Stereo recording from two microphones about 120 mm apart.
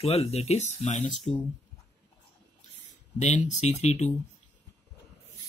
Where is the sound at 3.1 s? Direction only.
80° left; by 4.1 s 65° left (ahead or behind).